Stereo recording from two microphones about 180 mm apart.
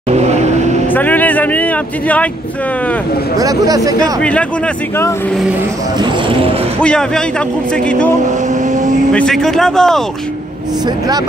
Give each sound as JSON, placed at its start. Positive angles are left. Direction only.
{"t": 0.1, "sound": "vehicle", "side_deg": -40}
{"t": 0.9, "sound": "vehicle", "side_deg": 10}
{"t": 3.3, "sound": "speech", "side_deg": -20}
{"t": 4.2, "sound": "speech", "side_deg": 5}
{"t": 5.9, "sound": "speech", "side_deg": -25}
{"t": 6.8, "sound": "speech", "side_deg": 5}
{"t": 9.1, "sound": "speech", "side_deg": 5}